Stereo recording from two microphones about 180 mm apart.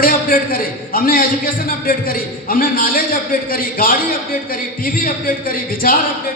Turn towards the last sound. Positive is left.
turn(degrees=50)  # may be behind; listen again after turning